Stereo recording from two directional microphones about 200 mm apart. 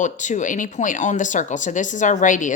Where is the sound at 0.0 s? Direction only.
35° left (ahead or behind).